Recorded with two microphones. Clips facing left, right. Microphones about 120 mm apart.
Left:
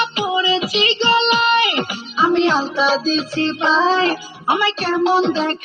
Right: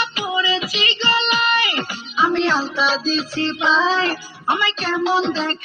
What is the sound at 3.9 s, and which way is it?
Music, centre (ahead or behind).